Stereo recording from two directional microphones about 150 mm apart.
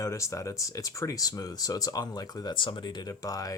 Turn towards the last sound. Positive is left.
turn(degrees=25)  # may be behind; listen again after turning